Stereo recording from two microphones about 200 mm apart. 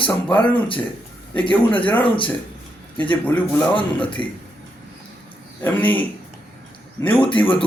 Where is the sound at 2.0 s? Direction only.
25° left (ahead or behind).